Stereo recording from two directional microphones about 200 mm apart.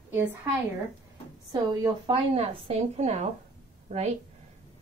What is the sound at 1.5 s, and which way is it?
Speech, 20° right (ahead or behind).